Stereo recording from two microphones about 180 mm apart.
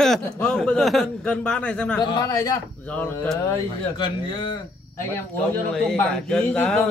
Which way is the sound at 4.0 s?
25° left (ahead or behind).